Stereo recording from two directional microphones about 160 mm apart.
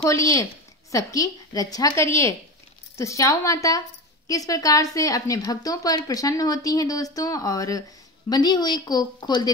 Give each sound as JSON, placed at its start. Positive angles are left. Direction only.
{"t": 0.0, "sound": "a woman's voice", "side_deg": 20}